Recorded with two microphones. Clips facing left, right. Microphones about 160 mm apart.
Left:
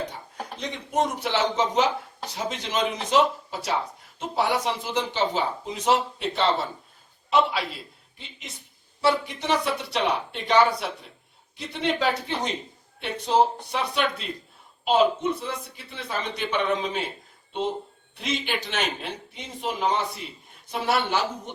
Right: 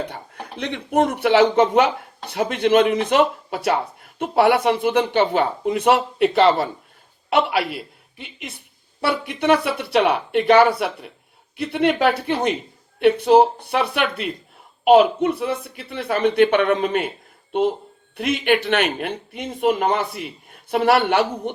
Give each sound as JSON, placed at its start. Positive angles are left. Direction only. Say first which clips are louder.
{"t": 0.5, "sound": "a man's voice", "louder": "right 7 dB", "side_deg": -65}
{"t": 18.2, "sound": "a man's voice", "louder": "right 10 dB", "side_deg": -60}